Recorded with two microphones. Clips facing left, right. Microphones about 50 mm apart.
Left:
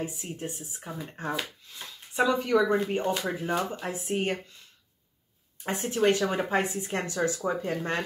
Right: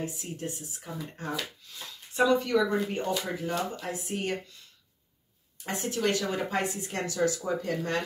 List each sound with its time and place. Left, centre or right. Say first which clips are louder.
0.0 s speech: left 1 dB; left
5.6 s speech: left 3 dB; left